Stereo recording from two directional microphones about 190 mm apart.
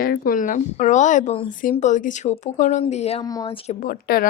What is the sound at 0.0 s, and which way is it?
Speech, 50° left (ahead or behind).